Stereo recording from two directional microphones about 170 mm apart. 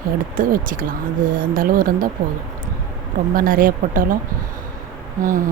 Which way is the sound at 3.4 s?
55° right (ahead or behind).